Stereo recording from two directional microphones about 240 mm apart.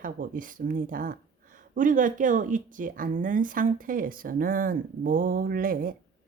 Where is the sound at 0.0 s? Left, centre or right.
Right.